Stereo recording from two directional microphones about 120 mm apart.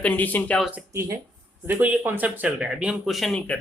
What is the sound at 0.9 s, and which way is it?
Speech, 25° right (ahead or behind).